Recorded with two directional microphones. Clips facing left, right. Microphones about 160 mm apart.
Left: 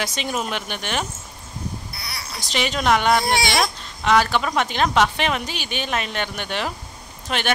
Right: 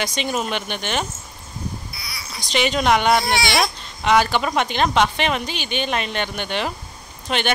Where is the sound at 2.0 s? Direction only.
60° left (ahead or behind).